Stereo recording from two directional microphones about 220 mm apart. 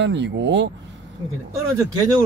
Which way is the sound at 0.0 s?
55° right (ahead or behind).